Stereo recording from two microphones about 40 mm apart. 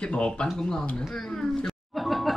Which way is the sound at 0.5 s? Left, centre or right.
Centre.